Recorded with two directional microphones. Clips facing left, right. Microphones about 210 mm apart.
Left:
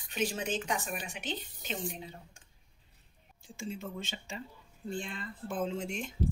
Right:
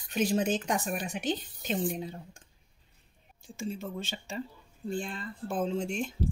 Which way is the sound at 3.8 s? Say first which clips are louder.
Right 3 dB; 35° right (ahead or behind).